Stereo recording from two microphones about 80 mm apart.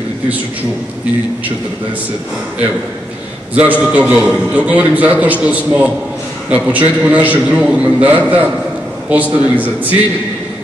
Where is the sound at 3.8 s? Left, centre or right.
Centre.